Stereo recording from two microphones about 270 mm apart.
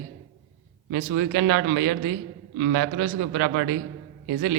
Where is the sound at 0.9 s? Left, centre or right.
Right.